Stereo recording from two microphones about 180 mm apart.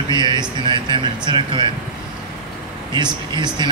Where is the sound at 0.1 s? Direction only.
25° right (ahead or behind).